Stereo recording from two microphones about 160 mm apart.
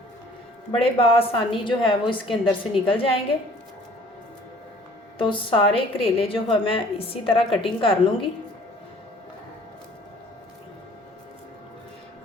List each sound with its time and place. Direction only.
0.7 s a woman's voice: 35° left (ahead or behind)
5.1 s a woman's voice: 30° left (ahead or behind)